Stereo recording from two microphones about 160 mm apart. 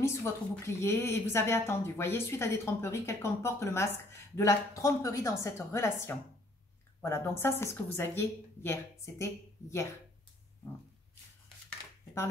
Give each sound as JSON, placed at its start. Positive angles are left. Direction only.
{"t": 0.0, "sound": "a woman's voice", "side_deg": 15}